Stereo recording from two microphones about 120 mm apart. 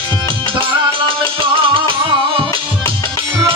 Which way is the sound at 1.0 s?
45° right (ahead or behind).